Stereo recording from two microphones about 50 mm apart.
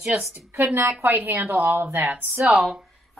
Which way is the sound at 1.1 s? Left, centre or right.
Right.